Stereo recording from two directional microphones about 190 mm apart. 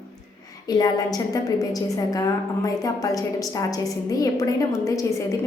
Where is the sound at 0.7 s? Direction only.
20° left (ahead or behind).